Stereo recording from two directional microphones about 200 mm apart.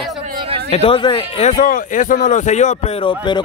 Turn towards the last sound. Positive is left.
turn(degrees=25)  # may be behind; listen again after turning